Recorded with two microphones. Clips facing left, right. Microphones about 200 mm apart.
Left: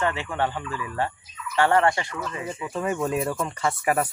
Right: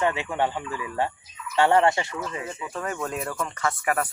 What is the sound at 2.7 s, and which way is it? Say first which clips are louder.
Speech: left 5 dB; 15° left (ahead or behind).